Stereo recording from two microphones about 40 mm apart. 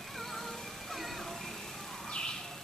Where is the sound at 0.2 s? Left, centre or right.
Centre.